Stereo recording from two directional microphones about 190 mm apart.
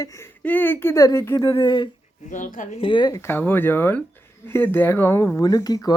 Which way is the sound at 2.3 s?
45° left (ahead or behind).